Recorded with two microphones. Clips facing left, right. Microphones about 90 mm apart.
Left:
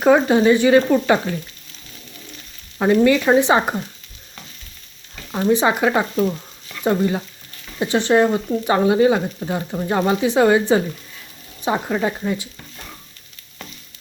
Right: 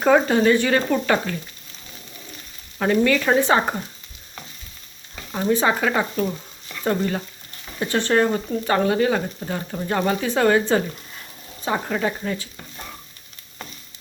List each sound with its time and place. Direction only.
0.0 s speech: 10° left (ahead or behind)
2.7 s speech: 15° left (ahead or behind)
5.5 s speech: 15° left (ahead or behind)